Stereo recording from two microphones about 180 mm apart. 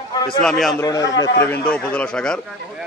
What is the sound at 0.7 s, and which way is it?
A man's voice, 20° left (ahead or behind).